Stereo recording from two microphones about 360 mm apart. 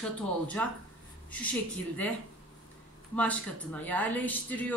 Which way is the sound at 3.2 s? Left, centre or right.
Centre.